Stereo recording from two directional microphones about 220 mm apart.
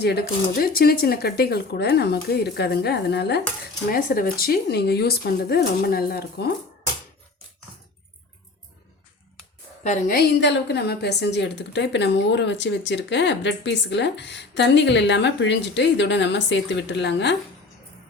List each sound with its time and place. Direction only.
0.0 s a woman's voice: 45° left (ahead or behind)
9.8 s a woman's voice: 35° left (ahead or behind); by 17.3 s 55° left (ahead or behind)